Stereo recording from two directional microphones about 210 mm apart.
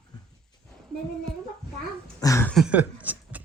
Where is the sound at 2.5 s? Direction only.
5° right (ahead or behind).